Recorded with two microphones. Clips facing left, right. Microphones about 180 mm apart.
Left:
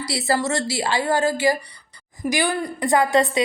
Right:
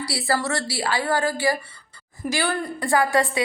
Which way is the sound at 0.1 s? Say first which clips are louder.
Left 3 dB; 20° left (ahead or behind).